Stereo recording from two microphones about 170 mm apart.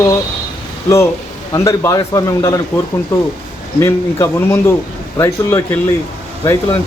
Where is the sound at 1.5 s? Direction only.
15° left (ahead or behind).